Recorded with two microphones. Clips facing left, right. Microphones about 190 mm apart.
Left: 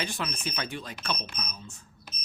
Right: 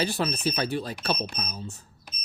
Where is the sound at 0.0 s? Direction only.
35° right (ahead or behind).